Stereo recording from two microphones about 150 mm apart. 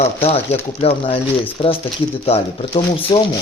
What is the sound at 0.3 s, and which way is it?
Speech, 45° left (ahead or behind).